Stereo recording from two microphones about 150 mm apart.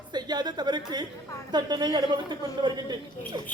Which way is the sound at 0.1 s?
30° right (ahead or behind).